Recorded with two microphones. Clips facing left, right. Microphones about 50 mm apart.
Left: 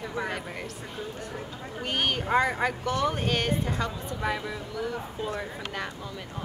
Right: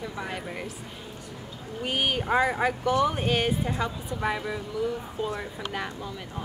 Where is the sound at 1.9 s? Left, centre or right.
Centre.